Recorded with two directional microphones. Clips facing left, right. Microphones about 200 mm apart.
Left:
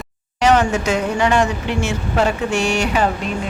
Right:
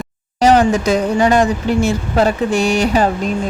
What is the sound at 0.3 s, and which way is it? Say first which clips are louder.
Speech: right 4 dB; 35° right (ahead or behind).